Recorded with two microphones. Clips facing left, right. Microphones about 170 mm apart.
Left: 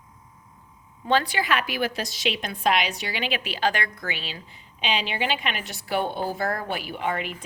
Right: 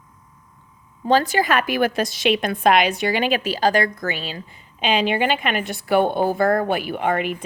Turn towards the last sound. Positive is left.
turn(degrees=-60)  # may be behind; listen again after turning